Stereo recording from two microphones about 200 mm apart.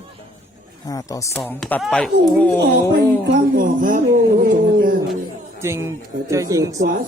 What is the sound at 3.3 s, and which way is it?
Speech, 45° right (ahead or behind).